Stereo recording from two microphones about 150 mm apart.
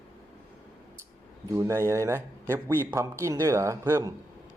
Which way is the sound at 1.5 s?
20° right (ahead or behind).